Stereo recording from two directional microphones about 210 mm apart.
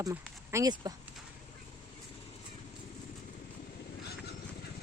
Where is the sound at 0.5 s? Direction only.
15° right (ahead or behind).